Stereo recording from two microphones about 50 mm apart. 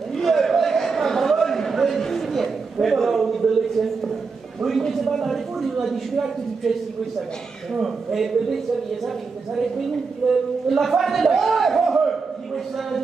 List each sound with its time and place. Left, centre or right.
0.1 s a sound: centre
4.6 s a man's voice: centre
7.8 s a man's voice: centre
9.6 s a man's voice: centre